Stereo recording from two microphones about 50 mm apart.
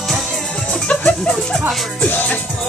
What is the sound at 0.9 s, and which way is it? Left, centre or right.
Music, left.